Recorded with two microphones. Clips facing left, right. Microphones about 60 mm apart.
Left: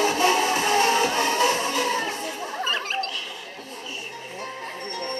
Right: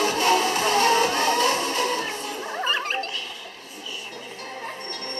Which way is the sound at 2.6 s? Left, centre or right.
Centre.